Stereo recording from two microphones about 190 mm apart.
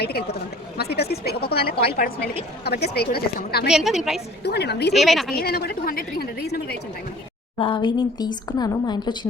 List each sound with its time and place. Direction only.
0.0 s a woman's voice: 55° left (ahead or behind)
3.7 s a woman's voice: centre (ahead or behind)
4.4 s a woman's voice: 60° left (ahead or behind)
4.9 s a woman's voice: centre (ahead or behind)
5.3 s a woman's voice: 55° left (ahead or behind)
7.6 s a woman's voice: 25° left (ahead or behind)